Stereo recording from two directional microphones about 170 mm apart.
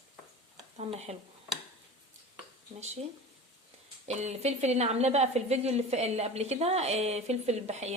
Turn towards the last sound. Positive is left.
turn(degrees=-40)  # may be behind; listen again after turning